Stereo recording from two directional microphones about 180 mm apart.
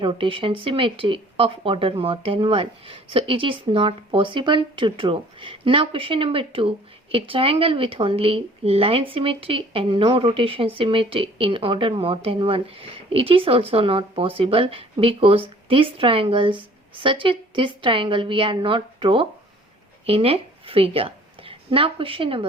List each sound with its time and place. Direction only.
0.0 s a woman's voice: 30° right (ahead or behind)